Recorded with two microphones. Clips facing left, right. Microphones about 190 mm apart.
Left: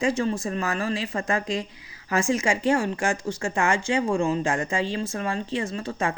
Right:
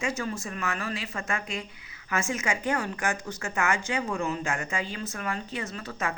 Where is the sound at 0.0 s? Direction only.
30° left (ahead or behind).